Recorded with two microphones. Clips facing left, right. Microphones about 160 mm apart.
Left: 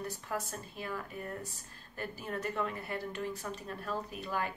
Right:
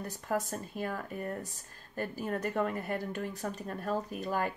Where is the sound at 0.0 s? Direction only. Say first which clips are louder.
Right 4 dB; 45° right (ahead or behind).